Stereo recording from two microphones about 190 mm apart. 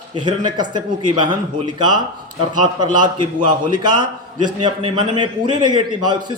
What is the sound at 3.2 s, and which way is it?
A man's voice, 25° right (ahead or behind).